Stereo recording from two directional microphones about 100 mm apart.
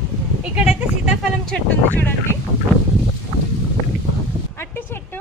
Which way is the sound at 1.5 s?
15° left (ahead or behind).